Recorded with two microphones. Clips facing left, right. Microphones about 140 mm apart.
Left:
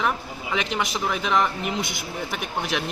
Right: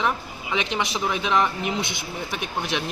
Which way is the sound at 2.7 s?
Centre (ahead or behind).